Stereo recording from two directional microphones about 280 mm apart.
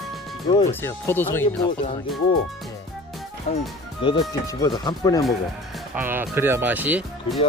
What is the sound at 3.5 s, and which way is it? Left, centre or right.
Speech, left.